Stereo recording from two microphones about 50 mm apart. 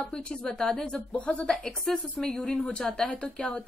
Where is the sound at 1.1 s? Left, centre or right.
Left.